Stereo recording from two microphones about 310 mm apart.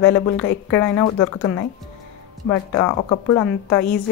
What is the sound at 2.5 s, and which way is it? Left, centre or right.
A woman's voice, centre.